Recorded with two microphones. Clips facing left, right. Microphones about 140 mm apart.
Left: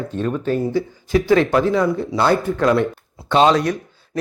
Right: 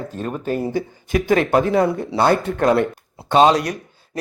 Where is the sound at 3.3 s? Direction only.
40° right (ahead or behind).